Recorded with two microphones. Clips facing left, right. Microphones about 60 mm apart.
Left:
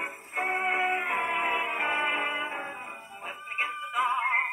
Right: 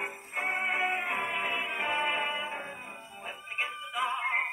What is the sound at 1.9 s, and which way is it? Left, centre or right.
Music, centre.